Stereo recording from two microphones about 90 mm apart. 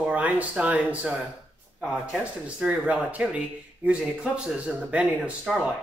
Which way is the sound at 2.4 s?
15° right (ahead or behind).